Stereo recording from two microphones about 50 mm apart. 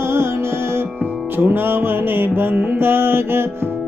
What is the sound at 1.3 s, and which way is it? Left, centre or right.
Music, right.